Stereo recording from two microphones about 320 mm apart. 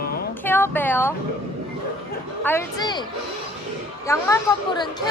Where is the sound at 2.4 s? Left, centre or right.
Centre.